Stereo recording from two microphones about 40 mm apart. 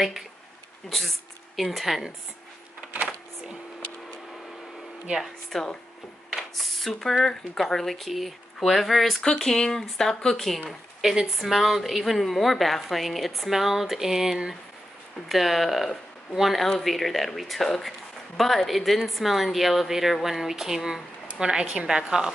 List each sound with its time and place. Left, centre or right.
0.8 s a woman's voice: centre
5.5 s a woman's voice: centre
9.2 s speech: centre
11.0 s a woman's voice: centre